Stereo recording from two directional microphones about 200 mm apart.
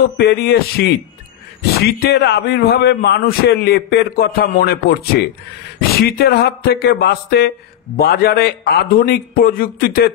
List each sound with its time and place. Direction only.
0.2 s a man's voice: 50° left (ahead or behind)